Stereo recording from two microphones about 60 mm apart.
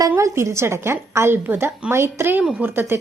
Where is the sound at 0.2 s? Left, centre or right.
Right.